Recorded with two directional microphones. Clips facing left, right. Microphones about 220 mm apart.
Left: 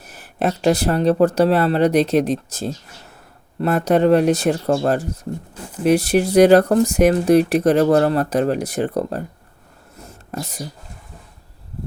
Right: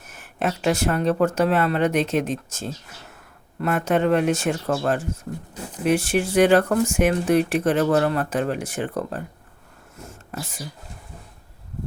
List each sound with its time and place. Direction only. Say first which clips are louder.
0.0 s speech: left 4 dB; 35° left (ahead or behind)
10.3 s speech: left 5 dB; 40° left (ahead or behind)